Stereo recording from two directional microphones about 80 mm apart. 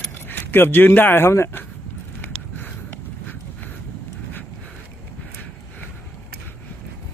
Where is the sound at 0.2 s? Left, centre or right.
Left.